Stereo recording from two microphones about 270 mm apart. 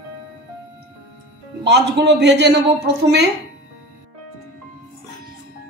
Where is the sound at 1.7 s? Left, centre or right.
Right.